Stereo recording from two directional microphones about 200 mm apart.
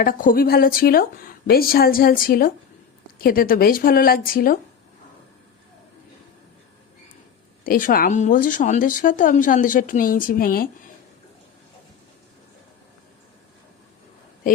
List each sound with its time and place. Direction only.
0.0 s speech: 45° left (ahead or behind)
7.6 s speech: 45° left (ahead or behind)